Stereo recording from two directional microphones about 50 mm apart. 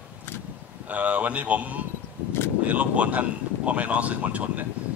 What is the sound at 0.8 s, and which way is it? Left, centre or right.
Speech, right.